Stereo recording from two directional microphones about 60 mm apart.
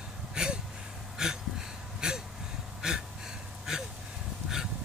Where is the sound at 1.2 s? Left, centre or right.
Centre.